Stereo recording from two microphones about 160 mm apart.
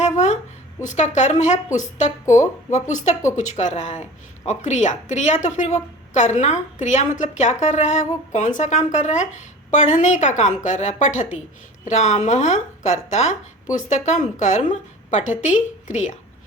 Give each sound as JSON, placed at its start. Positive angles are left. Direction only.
{"t": 0.0, "sound": "a sound", "side_deg": 45}
{"t": 0.8, "sound": "speech", "side_deg": 50}
{"t": 2.2, "sound": "speech", "side_deg": 15}
{"t": 2.9, "sound": "speech", "side_deg": 45}